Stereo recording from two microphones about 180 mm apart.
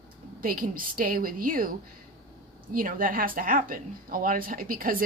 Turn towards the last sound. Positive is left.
turn(degrees=-50)  # may be behind; listen again after turning